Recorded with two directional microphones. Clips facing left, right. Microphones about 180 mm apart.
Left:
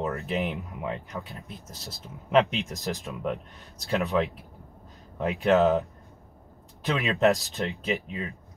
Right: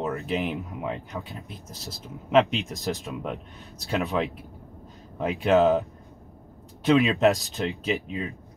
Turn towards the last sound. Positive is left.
turn(degrees=0)  # may be behind; listen again after turning